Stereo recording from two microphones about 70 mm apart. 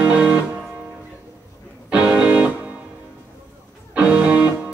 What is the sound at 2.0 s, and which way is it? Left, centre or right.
Music, centre.